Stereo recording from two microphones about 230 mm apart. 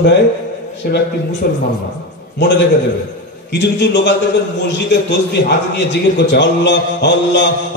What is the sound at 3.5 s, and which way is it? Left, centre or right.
Mantra, left.